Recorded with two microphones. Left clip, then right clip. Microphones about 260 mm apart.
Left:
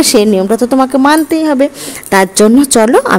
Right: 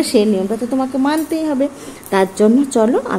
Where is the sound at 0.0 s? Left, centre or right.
Left.